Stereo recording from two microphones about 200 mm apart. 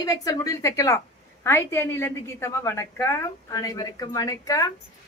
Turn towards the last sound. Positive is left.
turn(degrees=15)  # may be behind; listen again after turning